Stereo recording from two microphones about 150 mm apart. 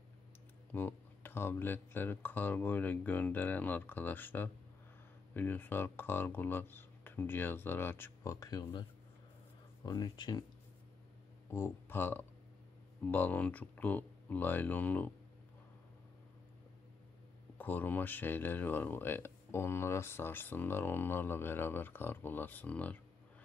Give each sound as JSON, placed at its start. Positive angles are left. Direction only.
{"t": 0.7, "sound": "speech", "side_deg": 10}
{"t": 9.8, "sound": "speech", "side_deg": 30}
{"t": 11.5, "sound": "speech", "side_deg": 15}
{"t": 17.6, "sound": "speech", "side_deg": 10}